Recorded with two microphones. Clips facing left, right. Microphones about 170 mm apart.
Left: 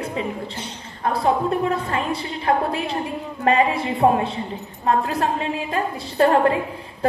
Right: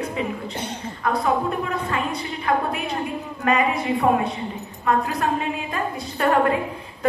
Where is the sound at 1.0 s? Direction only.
30° left (ahead or behind).